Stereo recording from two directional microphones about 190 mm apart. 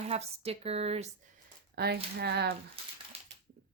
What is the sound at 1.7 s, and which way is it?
Speech, 60° right (ahead or behind).